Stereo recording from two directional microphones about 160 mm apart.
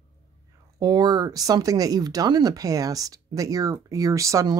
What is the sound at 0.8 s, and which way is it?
Speech, 25° right (ahead or behind).